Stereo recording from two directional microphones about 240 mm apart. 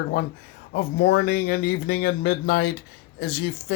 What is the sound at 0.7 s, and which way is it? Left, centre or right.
Speech, left.